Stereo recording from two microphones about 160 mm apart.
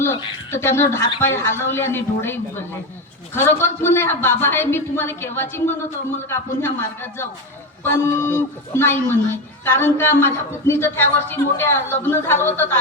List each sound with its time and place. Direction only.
0.5 s a man's voice: 15° left (ahead or behind)